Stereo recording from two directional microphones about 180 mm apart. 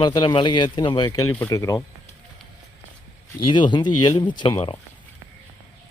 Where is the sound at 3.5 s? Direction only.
25° left (ahead or behind).